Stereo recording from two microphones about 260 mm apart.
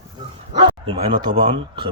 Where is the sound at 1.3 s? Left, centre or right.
Centre.